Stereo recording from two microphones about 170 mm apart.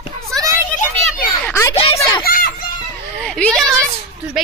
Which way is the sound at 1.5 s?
15° left (ahead or behind).